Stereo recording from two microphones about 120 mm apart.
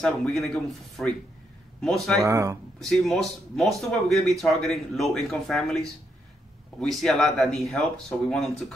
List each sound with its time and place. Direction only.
0.0 s speech: centre (ahead or behind)
2.1 s speech: 25° right (ahead or behind)
2.8 s speech: centre (ahead or behind)